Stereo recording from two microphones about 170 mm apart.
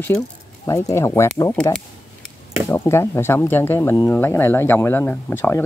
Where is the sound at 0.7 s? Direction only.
15° left (ahead or behind).